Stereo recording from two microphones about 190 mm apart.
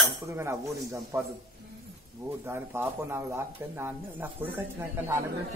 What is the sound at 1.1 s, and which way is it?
Speech, 15° right (ahead or behind).